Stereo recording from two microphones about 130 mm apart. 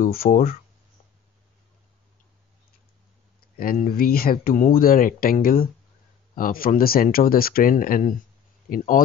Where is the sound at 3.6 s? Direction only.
90° left.